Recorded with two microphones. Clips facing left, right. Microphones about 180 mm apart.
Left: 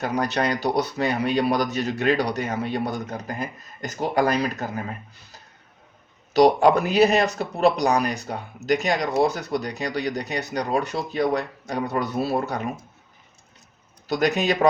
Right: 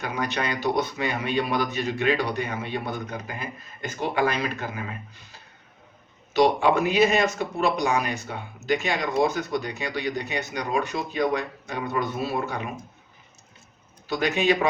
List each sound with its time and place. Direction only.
0.0 s speech: 40° left (ahead or behind)
14.1 s speech: 40° left (ahead or behind)